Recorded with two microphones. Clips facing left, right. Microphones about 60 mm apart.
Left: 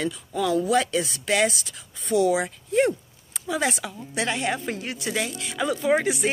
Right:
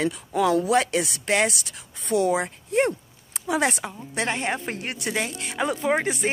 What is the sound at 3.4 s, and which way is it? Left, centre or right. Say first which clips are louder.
Music: right 2 dB; right.